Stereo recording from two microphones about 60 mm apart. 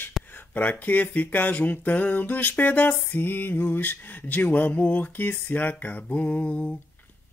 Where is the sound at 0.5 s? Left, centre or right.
Left.